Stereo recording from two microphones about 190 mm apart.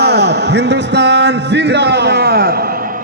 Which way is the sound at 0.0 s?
60° right (ahead or behind).